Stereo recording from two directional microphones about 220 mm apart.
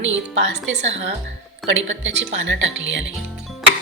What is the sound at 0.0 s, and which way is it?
A woman's voice, 55° right (ahead or behind).